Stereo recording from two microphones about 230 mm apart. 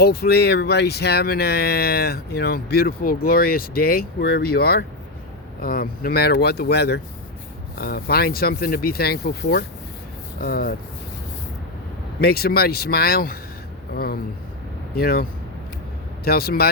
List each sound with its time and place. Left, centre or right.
0.0 s speech: left
12.2 s speech: left